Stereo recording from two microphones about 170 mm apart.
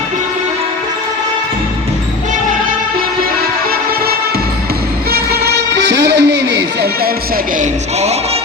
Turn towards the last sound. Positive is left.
turn(degrees=-90)